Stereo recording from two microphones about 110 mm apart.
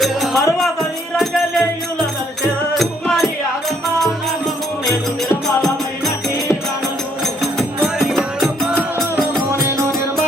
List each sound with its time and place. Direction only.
0.0 s music: centre (ahead or behind)
2.7 s music: centre (ahead or behind)
7.9 s music: centre (ahead or behind)
9.5 s music: 25° right (ahead or behind)